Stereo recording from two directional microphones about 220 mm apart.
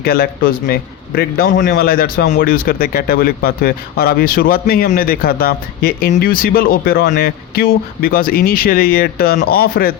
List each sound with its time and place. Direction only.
0.0 s a man's voice: 45° left (ahead or behind)